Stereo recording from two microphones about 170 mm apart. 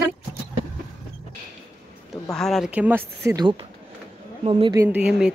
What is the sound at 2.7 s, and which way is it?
Speech, 10° right (ahead or behind).